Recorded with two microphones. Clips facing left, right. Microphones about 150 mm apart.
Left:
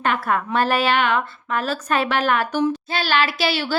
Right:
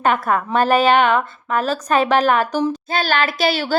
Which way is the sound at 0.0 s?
40° right (ahead or behind).